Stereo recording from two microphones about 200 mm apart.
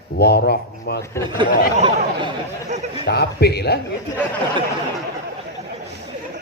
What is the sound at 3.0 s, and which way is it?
Mantra, 55° left (ahead or behind).